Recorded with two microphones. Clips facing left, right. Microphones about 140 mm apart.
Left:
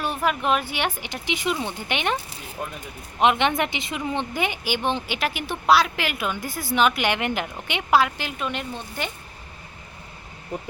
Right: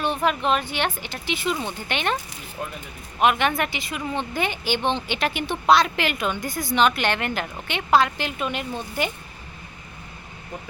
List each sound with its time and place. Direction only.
0.0 s a woman's voice: 5° left (ahead or behind)
2.6 s speech: 5° left (ahead or behind)
3.2 s a woman's voice: 20° left (ahead or behind); by 9.0 s centre (ahead or behind)